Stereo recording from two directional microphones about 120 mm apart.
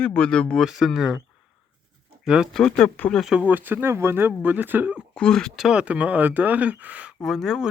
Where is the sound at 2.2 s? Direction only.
5° right (ahead or behind).